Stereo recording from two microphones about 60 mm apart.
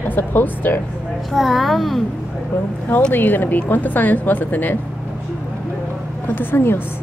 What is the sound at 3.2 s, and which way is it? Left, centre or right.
A woman's voice, left.